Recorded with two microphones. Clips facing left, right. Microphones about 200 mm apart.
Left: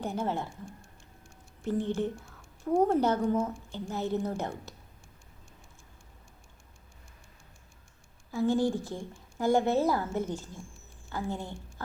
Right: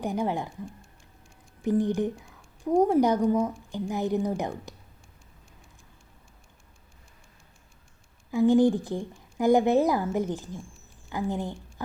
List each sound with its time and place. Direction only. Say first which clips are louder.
0.0 s a woman's voice: right 4 dB; 15° right (ahead or behind)
8.3 s a woman's voice: right 7 dB; 15° right (ahead or behind)